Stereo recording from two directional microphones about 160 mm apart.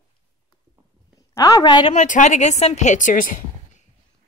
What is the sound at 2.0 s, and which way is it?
A woman's voice, 50° left (ahead or behind).